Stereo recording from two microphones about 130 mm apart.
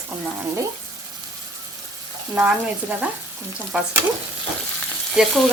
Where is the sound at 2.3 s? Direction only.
10° right (ahead or behind).